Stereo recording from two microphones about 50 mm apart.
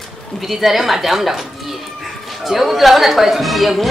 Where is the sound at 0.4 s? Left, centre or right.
Centre.